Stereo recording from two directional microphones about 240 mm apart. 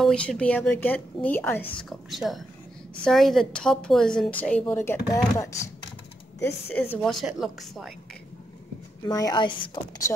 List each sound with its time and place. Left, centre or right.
0.0 s a woman's voice: centre
6.4 s a woman's voice: centre
9.0 s a woman's voice: centre